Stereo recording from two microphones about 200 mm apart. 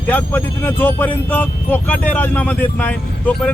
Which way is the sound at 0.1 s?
10° left (ahead or behind).